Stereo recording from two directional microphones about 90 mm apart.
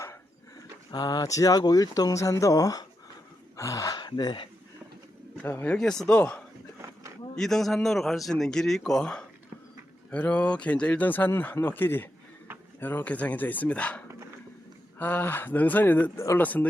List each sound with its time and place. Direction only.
0.9 s speech: 50° left (ahead or behind)
3.9 s speech: 55° left (ahead or behind)
5.4 s speech: 20° left (ahead or behind)
5.7 s speech: 5° left (ahead or behind)